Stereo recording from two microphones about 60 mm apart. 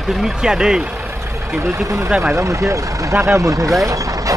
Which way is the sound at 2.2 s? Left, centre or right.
Right.